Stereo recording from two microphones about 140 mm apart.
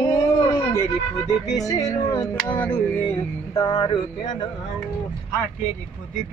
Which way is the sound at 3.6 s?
40° left (ahead or behind).